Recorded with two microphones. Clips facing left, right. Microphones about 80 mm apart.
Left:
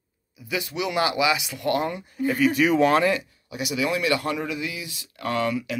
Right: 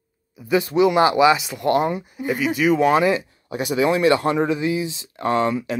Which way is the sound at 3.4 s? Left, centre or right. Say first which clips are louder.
Right 7 dB; right.